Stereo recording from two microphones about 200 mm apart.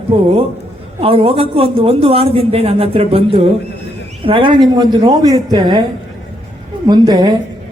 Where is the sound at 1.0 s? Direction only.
30° right (ahead or behind).